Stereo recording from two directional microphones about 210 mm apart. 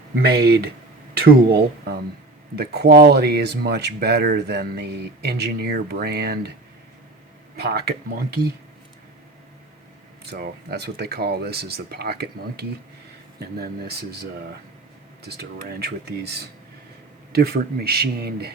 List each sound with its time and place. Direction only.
0.2 s speech: 50° right (ahead or behind)
7.5 s speech: 50° right (ahead or behind)
10.2 s speech: 50° right (ahead or behind)